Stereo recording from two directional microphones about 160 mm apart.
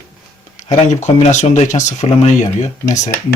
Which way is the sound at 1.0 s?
45° left (ahead or behind).